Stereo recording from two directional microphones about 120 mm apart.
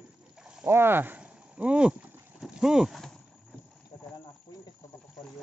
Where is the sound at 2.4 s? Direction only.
5° right (ahead or behind).